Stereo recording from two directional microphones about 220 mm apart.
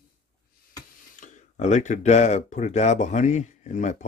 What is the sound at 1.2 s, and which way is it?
Speech, 35° left (ahead or behind).